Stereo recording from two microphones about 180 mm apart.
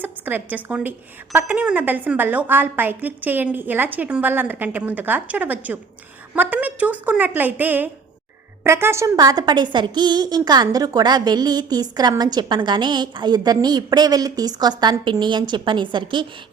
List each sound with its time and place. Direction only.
0.0 s a woman's voice: 10° right (ahead or behind); by 16.2 s 25° right (ahead or behind)